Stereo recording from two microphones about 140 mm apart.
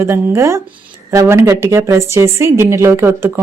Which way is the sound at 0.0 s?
15° right (ahead or behind).